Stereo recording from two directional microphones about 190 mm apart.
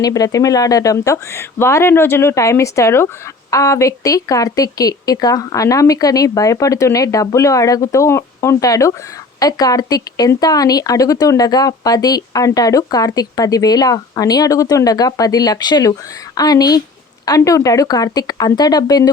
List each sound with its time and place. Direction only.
0.0 s a woman's voice: 20° left (ahead or behind)